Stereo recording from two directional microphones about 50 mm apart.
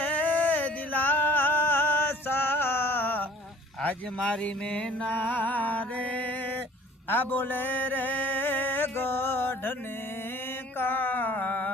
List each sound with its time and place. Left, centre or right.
0.0 s music: left
4.2 s mantra: centre
5.1 s music: left
7.1 s mantra: left
10.8 s music: left